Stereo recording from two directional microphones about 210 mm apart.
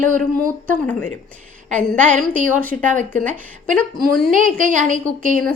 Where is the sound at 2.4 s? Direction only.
40° right (ahead or behind).